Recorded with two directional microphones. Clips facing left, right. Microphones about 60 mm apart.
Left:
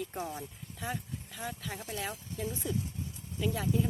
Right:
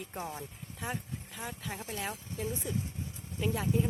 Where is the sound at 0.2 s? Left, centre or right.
Right.